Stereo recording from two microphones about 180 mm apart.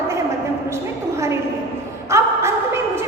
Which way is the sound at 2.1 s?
15° right (ahead or behind).